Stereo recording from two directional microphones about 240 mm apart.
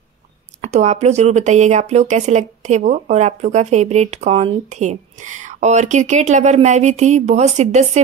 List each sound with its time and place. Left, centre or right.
0.6 s speech: right